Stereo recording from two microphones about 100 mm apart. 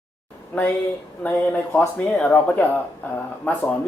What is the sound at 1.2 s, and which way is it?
Speech, 15° left (ahead or behind).